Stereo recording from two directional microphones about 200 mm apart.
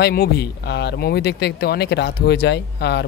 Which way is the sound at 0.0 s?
50° left (ahead or behind).